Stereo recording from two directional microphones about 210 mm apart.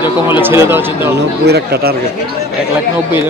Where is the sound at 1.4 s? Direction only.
50° right (ahead or behind).